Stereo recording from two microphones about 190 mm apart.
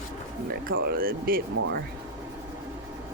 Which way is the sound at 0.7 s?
50° right (ahead or behind).